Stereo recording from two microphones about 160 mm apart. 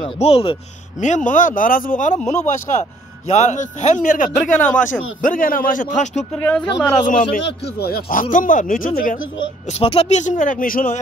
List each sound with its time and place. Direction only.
0.0 s speech: 35° left (ahead or behind)
0.9 s a man's voice: 50° left (ahead or behind)
6.3 s speech: 5° left (ahead or behind)
7.8 s speech: 70° left (ahead or behind)
9.7 s speech: 35° left (ahead or behind)
10.2 s speech: 55° left (ahead or behind)